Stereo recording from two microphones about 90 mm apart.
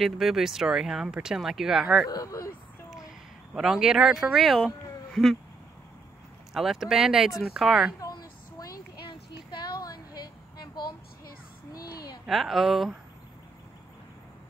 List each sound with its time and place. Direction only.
0.0 s speech: centre (ahead or behind)
2.0 s speech: 40° left (ahead or behind)
3.5 s speech: 5° right (ahead or behind)
6.5 s speech: 5° right (ahead or behind)
8.0 s a sound: 40° left (ahead or behind)
11.7 s a sound: 40° left (ahead or behind)
12.3 s speech: centre (ahead or behind)